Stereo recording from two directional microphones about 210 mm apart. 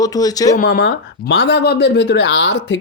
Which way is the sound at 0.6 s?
45° left (ahead or behind).